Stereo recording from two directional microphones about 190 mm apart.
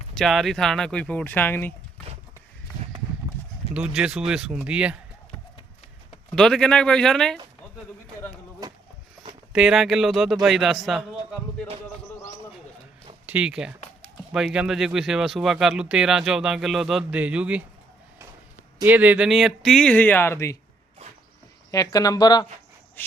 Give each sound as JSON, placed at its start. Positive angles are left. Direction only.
{"t": 0.1, "sound": "speech", "side_deg": 0}
{"t": 3.8, "sound": "speech", "side_deg": -5}
{"t": 6.3, "sound": "speech", "side_deg": 5}
{"t": 8.6, "sound": "a sound", "side_deg": -20}
{"t": 9.5, "sound": "a man's voice", "side_deg": -5}
{"t": 13.2, "sound": "speech", "side_deg": -5}
{"t": 18.9, "sound": "speech", "side_deg": -10}
{"t": 21.7, "sound": "speech", "side_deg": 20}
{"t": 23.0, "sound": "a sound", "side_deg": 10}